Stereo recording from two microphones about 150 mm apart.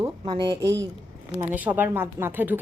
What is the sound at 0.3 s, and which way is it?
Speech, 30° right (ahead or behind).